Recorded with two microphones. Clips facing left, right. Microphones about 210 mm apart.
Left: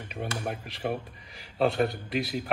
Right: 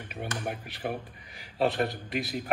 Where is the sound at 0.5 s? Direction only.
5° right (ahead or behind).